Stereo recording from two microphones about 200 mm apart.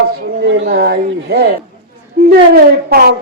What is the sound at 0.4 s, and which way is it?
A woman's voice, 65° right (ahead or behind).